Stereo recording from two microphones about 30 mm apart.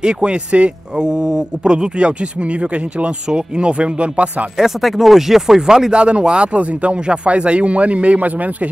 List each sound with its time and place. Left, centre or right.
0.0 s speech: right
4.6 s speech: centre
5.6 s speech: right
5.9 s speech: right
6.5 s speech: right
8.2 s speech: right